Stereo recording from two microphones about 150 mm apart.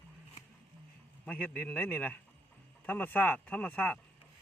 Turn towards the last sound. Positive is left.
turn(degrees=10)  # may be behind; listen again after turning